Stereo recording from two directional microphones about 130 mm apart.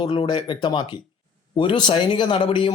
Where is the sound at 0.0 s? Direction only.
40° left (ahead or behind).